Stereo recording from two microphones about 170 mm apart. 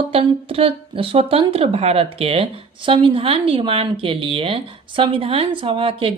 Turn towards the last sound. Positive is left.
turn(degrees=-35)  # may be behind; listen again after turning